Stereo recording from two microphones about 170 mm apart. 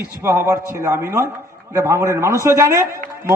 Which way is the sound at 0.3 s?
15° right (ahead or behind).